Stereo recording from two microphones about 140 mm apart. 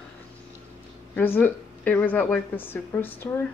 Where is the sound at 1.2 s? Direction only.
15° left (ahead or behind).